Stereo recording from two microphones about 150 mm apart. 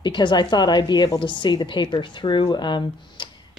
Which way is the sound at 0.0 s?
30° left (ahead or behind).